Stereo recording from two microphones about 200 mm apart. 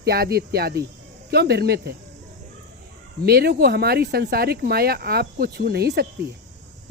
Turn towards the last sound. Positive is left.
turn(degrees=-55)  # may be behind; listen again after turning